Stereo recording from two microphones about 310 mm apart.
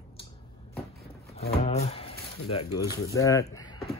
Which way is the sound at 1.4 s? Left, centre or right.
Centre.